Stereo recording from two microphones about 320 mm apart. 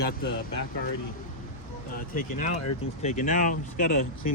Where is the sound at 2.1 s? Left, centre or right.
Left.